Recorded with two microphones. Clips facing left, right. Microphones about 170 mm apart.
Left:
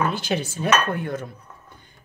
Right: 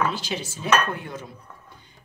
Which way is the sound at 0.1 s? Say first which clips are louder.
Left 5 dB; 55° left (ahead or behind).